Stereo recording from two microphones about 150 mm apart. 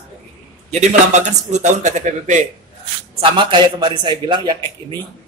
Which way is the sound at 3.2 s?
35° right (ahead or behind).